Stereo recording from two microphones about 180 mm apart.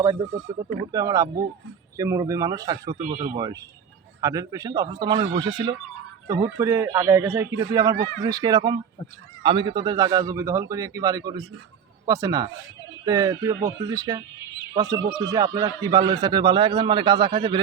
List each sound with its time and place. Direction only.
0.9 s a man's voice: 20° right (ahead or behind)
3.1 s speech: 35° right (ahead or behind)
3.3 s a man's voice: 20° right (ahead or behind)